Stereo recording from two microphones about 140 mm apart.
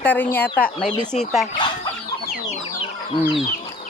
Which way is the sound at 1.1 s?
Centre (ahead or behind).